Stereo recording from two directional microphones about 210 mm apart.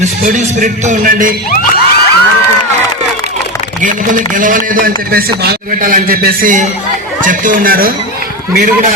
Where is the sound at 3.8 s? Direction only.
40° right (ahead or behind).